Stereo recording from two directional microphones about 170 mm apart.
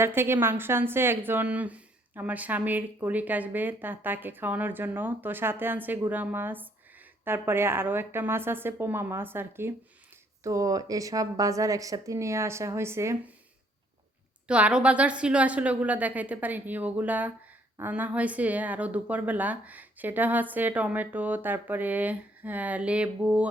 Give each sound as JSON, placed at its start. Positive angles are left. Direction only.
{"t": 0.0, "sound": "a woman's voice", "side_deg": -15}
{"t": 14.4, "sound": "a woman's voice", "side_deg": -5}